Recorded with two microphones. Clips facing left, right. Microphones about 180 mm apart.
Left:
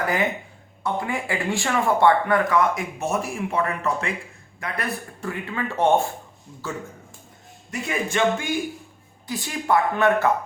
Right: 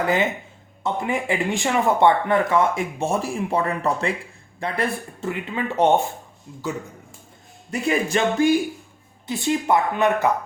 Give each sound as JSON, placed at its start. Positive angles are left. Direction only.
{"t": 0.0, "sound": "speech", "side_deg": -25}
{"t": 7.7, "sound": "music", "side_deg": -35}
{"t": 9.2, "sound": "speech", "side_deg": -25}